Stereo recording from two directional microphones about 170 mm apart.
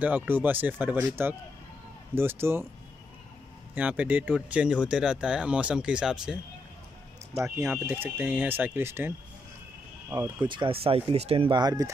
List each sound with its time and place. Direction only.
0.0 s speech: 10° right (ahead or behind)
3.7 s speech: 10° right (ahead or behind)
7.4 s speech: 15° right (ahead or behind)